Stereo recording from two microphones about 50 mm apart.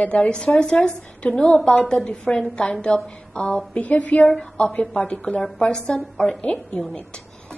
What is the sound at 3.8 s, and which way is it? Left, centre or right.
A woman's voice, left.